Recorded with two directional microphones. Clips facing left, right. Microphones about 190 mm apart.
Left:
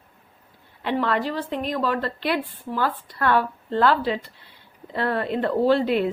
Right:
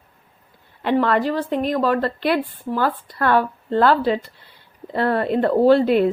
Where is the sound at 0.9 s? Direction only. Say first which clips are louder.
Right 5 dB; 50° right (ahead or behind).